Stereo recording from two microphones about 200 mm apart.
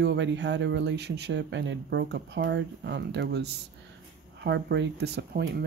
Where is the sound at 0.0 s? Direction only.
60° right (ahead or behind).